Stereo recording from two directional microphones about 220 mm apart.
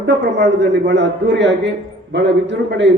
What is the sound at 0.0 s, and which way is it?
A man's voice, 50° right (ahead or behind).